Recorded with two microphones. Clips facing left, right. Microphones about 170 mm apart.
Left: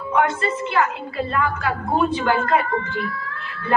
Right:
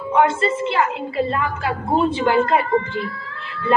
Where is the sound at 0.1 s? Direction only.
25° right (ahead or behind).